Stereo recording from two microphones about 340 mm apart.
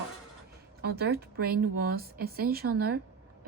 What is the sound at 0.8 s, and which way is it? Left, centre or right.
Speech, right.